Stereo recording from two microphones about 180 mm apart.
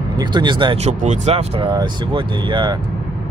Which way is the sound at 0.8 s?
40° right (ahead or behind).